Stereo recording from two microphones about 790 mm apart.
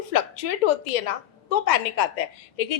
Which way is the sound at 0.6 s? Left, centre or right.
Left.